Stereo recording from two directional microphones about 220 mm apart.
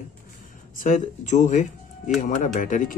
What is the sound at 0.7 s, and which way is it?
Speech, 35° left (ahead or behind).